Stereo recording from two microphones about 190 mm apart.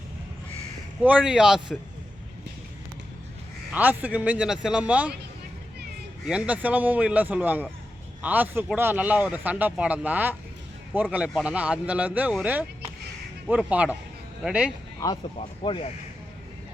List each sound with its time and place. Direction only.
1.0 s speech: 5° right (ahead or behind)
3.7 s a man's voice: 10° right (ahead or behind)
6.2 s a man's voice: 5° right (ahead or behind)
15.0 s speech: 20° left (ahead or behind)
15.4 s speech: 30° left (ahead or behind)